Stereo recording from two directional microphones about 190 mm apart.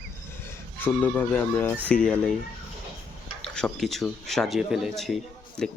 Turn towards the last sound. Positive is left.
turn(degrees=0)  # may be behind; listen again after turning